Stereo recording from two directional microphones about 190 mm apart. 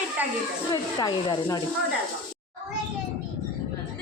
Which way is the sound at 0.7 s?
20° left (ahead or behind).